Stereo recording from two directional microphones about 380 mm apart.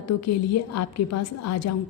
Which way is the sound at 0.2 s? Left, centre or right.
Left.